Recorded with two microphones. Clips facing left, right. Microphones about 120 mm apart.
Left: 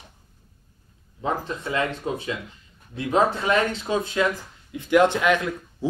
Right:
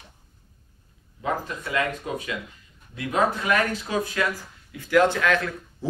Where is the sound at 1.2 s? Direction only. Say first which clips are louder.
Left 1 dB; 30° left (ahead or behind).